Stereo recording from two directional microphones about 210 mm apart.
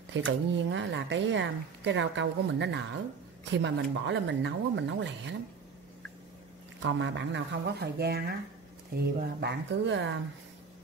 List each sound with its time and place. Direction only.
0.1 s speech: 60° right (ahead or behind)
6.8 s speech: 60° right (ahead or behind)